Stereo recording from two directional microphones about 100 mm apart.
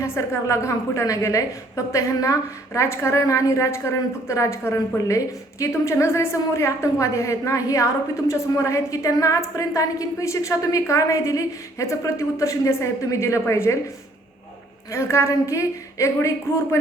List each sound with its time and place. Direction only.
0.0 s a woman's voice: 30° left (ahead or behind)
14.9 s a woman's voice: 25° left (ahead or behind)